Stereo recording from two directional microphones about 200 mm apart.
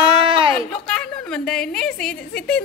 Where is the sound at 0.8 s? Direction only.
5° left (ahead or behind).